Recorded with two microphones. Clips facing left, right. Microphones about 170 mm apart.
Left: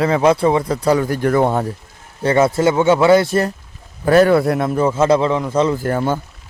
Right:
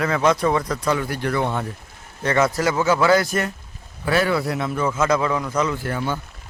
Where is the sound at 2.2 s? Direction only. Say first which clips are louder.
Left 6 dB; 30° left (ahead or behind).